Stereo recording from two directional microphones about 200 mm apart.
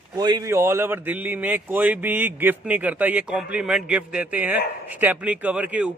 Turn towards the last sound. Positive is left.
turn(degrees=-5)  # may be behind; listen again after turning